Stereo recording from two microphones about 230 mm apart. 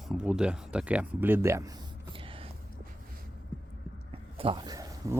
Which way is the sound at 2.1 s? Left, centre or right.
Right.